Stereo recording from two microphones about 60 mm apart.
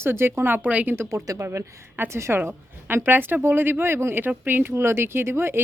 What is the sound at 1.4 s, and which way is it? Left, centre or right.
A woman's voice, right.